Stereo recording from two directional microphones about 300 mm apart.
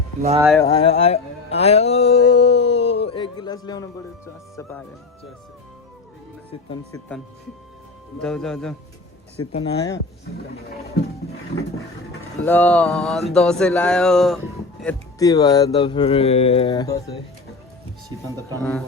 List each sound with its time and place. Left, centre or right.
0.6 s music: centre
2.6 s a sound: centre
6.5 s speech: centre
8.2 s speech: centre
9.5 s music: centre
12.4 s speech: centre
18.1 s speech: centre
18.6 s speech: centre